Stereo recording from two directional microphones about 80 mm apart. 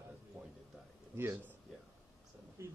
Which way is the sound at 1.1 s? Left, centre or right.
Right.